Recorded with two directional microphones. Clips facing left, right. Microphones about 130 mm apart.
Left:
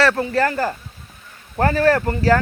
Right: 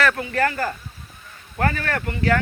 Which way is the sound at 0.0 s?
30° left (ahead or behind).